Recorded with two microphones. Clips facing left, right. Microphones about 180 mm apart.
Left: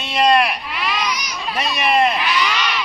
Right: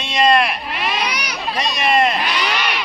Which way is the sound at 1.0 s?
65° right (ahead or behind).